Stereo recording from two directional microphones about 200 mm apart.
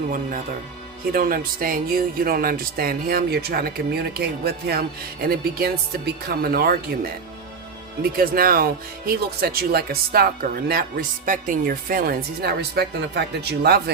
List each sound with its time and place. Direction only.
0.1 s speech: 45° right (ahead or behind)
8.1 s speech: 45° right (ahead or behind)